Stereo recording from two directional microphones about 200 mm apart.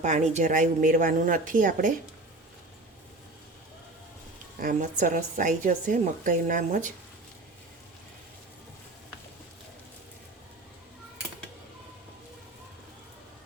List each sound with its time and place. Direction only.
0.0 s a woman's voice: 35° right (ahead or behind)
4.6 s a woman's voice: 40° right (ahead or behind)